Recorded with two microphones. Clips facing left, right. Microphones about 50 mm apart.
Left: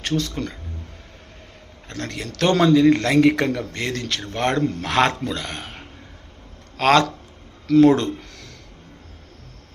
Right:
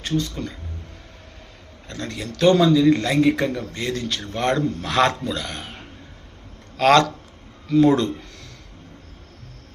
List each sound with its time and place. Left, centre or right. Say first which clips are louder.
0.0 s speech: left 1 dB; left
2.0 s a man's voice: left 1 dB; left
2.2 s a man's voice: right 2 dB; left
4.3 s a man's voice: even; left
6.7 s speech: right 1 dB; left
7.7 s a man's voice: left 3 dB; left
7.9 s speech: right 1 dB; left